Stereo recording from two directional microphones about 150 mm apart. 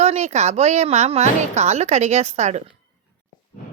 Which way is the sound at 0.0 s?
45° right (ahead or behind).